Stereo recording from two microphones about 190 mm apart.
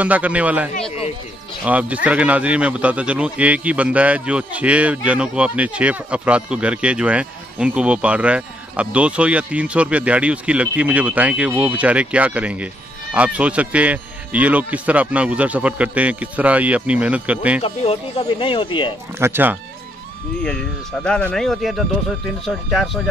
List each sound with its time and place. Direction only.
0.0 s a man's voice: 5° right (ahead or behind)
17.6 s speech: 30° left (ahead or behind)
19.1 s a man's voice: 10° right (ahead or behind)
20.4 s speech: 5° left (ahead or behind)